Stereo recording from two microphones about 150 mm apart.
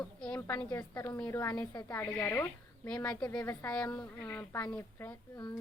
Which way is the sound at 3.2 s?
25° left (ahead or behind).